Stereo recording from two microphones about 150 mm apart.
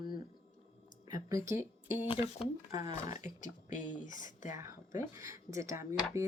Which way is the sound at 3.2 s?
60° left (ahead or behind).